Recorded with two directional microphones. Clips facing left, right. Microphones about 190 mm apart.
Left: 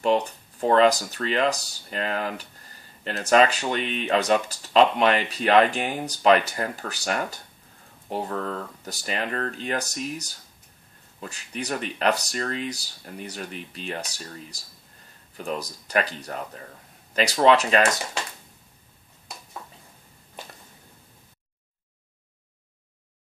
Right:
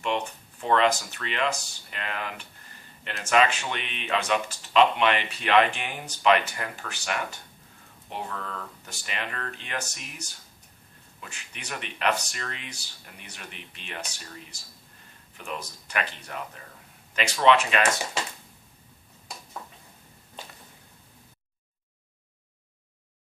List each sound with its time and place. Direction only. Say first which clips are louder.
0.0 s speech: left 7 dB; 35° left (ahead or behind)